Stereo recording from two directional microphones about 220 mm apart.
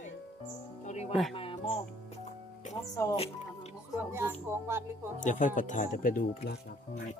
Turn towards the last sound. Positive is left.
turn(degrees=40)  # may be behind; listen again after turning